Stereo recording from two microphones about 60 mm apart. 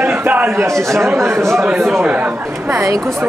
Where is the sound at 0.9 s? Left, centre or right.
Right.